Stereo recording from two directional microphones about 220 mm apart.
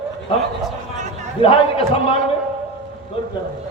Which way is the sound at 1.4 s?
25° left (ahead or behind).